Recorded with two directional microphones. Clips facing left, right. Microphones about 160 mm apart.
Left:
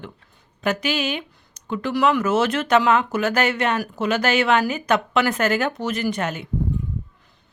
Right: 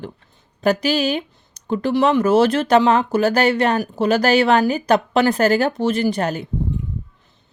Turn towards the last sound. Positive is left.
turn(degrees=-35)  # may be behind; listen again after turning